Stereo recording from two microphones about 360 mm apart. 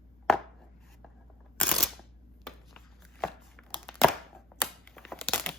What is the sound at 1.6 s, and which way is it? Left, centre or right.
Camera, centre.